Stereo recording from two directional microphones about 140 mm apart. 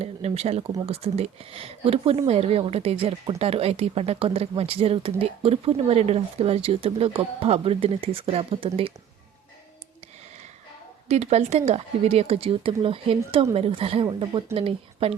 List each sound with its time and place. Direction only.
0.0 s speech: 50° right (ahead or behind)
11.1 s speech: 50° right (ahead or behind)